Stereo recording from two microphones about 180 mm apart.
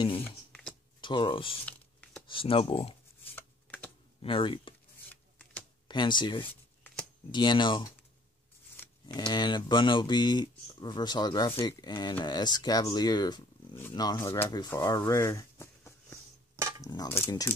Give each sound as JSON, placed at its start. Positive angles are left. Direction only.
{"t": 0.5, "sound": "a sound", "side_deg": 5}
{"t": 1.0, "sound": "speech", "side_deg": 30}
{"t": 1.7, "sound": "a sound", "side_deg": 10}
{"t": 2.2, "sound": "speech", "side_deg": 30}
{"t": 3.3, "sound": "a sound", "side_deg": 10}
{"t": 4.2, "sound": "speech", "side_deg": 30}
{"t": 5.9, "sound": "speech", "side_deg": 25}
{"t": 6.5, "sound": "shuffling cards", "side_deg": 10}
{"t": 7.2, "sound": "speech", "side_deg": 25}
{"t": 9.0, "sound": "speech", "side_deg": 25}
{"t": 16.5, "sound": "cutlery", "side_deg": -15}
{"t": 16.8, "sound": "speech", "side_deg": 20}